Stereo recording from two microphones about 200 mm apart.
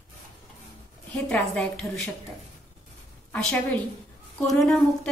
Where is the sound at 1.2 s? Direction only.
5° left (ahead or behind).